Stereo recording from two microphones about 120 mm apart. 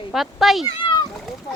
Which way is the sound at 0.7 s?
40° left (ahead or behind).